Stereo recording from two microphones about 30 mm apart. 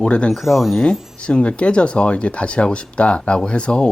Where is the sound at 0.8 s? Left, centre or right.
Left.